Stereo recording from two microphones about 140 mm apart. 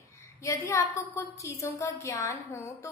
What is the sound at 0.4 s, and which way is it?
A woman's voice, 20° left (ahead or behind).